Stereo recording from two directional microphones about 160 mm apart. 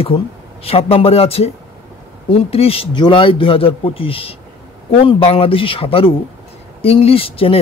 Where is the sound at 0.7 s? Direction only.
35° left (ahead or behind).